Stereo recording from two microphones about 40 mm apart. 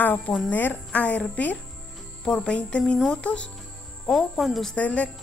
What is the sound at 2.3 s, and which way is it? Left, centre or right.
Music, left.